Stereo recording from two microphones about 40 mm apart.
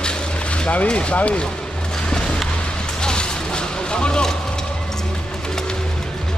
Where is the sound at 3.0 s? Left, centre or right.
Left.